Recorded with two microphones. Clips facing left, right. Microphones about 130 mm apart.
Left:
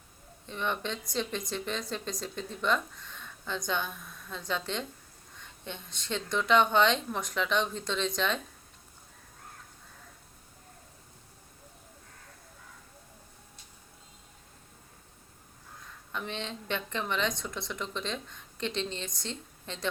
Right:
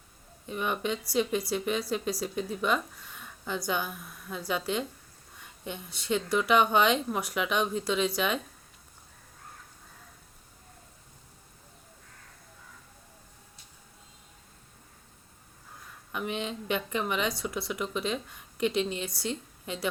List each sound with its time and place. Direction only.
0.4 s speech: 10° right (ahead or behind)
16.1 s speech: 10° right (ahead or behind)